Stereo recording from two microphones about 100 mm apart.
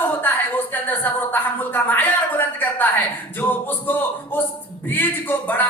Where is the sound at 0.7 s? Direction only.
20° left (ahead or behind).